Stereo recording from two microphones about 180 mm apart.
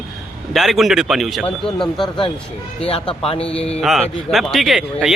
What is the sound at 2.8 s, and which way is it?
A man's voice, 30° left (ahead or behind).